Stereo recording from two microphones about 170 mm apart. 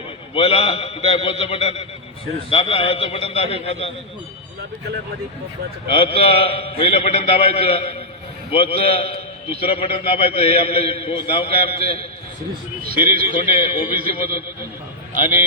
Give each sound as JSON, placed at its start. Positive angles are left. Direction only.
{"t": 0.3, "sound": "a man's voice", "side_deg": 35}
{"t": 5.9, "sound": "a man's voice", "side_deg": 35}
{"t": 12.8, "sound": "speech", "side_deg": -60}
{"t": 13.5, "sound": "a man's voice", "side_deg": 30}
{"t": 13.9, "sound": "speech", "side_deg": -60}